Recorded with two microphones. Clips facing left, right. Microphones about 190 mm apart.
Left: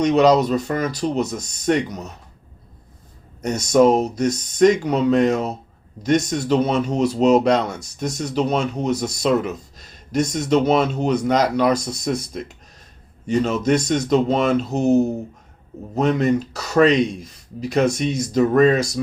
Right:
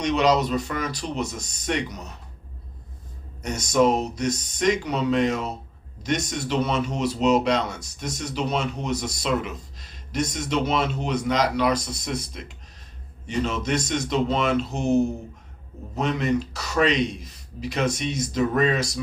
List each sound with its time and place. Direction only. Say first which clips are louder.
0.0 s speech: left 6 dB; 40° left (ahead or behind)
3.4 s speech: left 5 dB; 45° left (ahead or behind)